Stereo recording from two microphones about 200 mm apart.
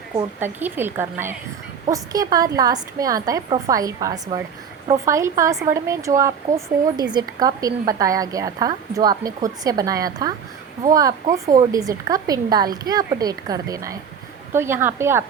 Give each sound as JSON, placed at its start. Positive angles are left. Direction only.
{"t": 0.1, "sound": "a woman's voice", "side_deg": -10}